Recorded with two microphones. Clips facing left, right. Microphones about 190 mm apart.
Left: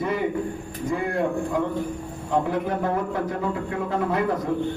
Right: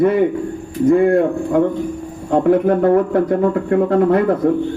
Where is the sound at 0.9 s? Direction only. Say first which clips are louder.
Right 12 dB; 55° right (ahead or behind).